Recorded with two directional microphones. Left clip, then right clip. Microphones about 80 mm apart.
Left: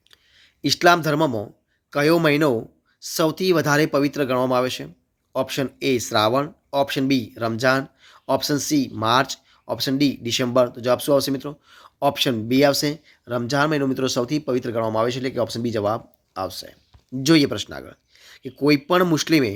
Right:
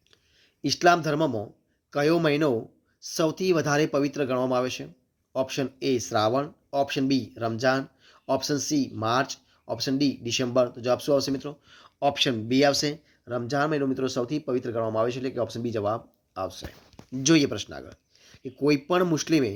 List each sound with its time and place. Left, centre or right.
0.6 s speech: left
13.1 s speech: left
17.3 s speech: left